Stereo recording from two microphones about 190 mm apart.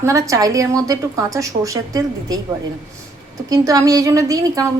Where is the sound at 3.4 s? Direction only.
20° right (ahead or behind).